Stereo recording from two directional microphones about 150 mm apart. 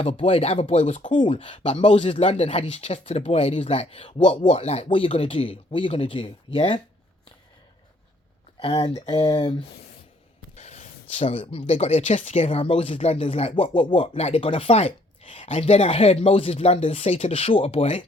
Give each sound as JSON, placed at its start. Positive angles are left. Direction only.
{"t": 0.0, "sound": "speech", "side_deg": 40}
{"t": 1.1, "sound": "speech", "side_deg": 35}
{"t": 8.5, "sound": "speech", "side_deg": 40}
{"t": 10.5, "sound": "a sound", "side_deg": 50}
{"t": 11.6, "sound": "speech", "side_deg": 45}